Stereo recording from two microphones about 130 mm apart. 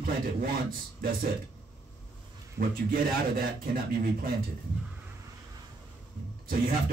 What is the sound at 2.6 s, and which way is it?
Speech, 65° right (ahead or behind).